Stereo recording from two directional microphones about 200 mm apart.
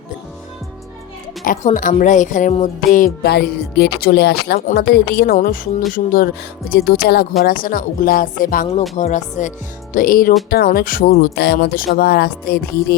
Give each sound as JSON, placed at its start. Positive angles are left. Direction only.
{"t": 1.5, "sound": "speech", "side_deg": 40}
{"t": 9.0, "sound": "music", "side_deg": 35}
{"t": 9.9, "sound": "speech", "side_deg": 45}